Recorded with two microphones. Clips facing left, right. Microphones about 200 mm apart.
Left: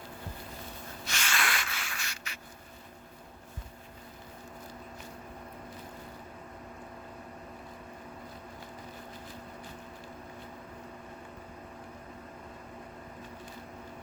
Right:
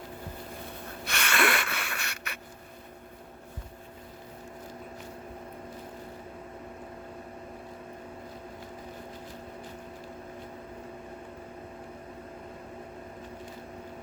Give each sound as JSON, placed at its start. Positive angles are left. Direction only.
{"t": 1.0, "sound": "gasp", "side_deg": -60}